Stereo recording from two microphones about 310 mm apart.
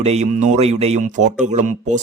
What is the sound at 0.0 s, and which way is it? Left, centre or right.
Speech, right.